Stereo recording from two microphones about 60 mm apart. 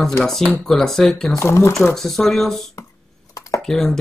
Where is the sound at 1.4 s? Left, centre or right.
Left.